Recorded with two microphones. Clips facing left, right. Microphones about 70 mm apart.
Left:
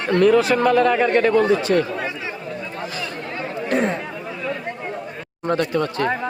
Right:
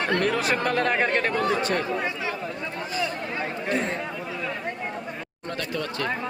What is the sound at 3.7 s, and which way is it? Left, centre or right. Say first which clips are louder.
Chatter: left 7 dB; left.